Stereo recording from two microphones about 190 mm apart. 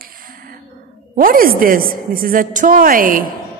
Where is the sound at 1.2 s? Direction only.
50° right (ahead or behind).